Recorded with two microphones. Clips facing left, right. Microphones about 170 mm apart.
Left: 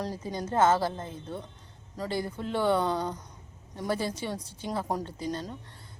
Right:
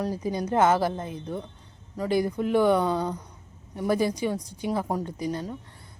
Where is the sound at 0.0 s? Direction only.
10° right (ahead or behind).